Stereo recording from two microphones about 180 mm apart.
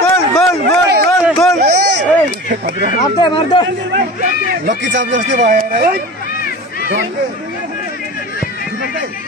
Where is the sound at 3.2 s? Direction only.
25° left (ahead or behind).